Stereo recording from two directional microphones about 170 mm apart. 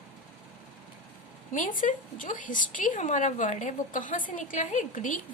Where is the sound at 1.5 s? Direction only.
50° left (ahead or behind).